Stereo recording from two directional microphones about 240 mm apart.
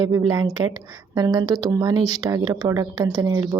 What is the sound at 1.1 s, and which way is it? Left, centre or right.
Speech, centre.